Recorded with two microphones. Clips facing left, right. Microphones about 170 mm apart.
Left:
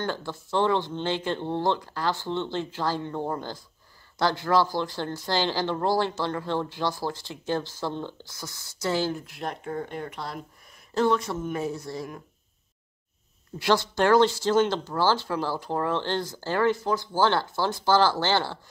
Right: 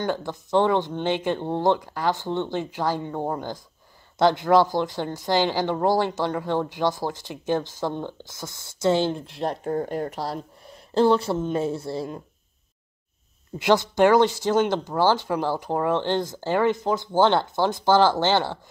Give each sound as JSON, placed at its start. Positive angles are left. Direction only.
{"t": 0.0, "sound": "speech", "side_deg": -15}
{"t": 13.6, "sound": "speech", "side_deg": -20}